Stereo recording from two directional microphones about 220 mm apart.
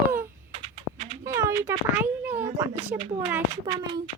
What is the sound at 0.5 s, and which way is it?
Typing, 30° right (ahead or behind).